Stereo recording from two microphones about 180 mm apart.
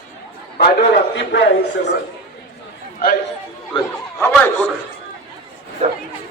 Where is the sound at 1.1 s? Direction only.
75° left (ahead or behind).